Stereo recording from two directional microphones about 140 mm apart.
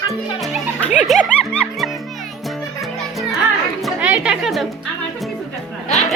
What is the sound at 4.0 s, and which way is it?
Chatter, 10° right (ahead or behind).